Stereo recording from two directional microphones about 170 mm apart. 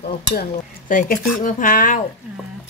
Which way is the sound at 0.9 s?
50° left (ahead or behind).